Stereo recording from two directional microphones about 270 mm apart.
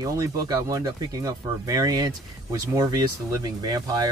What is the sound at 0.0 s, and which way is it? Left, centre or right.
Speech, centre.